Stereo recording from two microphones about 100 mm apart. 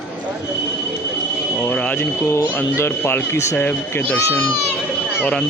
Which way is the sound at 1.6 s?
10° left (ahead or behind).